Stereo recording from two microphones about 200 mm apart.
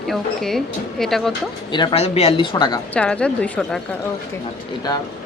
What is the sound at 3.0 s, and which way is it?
Speech, 5° left (ahead or behind).